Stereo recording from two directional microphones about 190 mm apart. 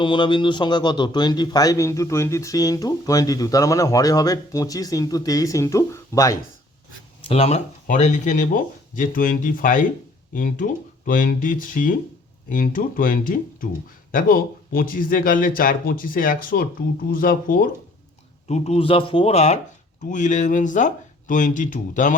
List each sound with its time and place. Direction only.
0.0 s a man's voice: 25° left (ahead or behind)
7.2 s speech: 30° left (ahead or behind); by 17.7 s 45° left (ahead or behind)
18.4 s speech: 35° left (ahead or behind)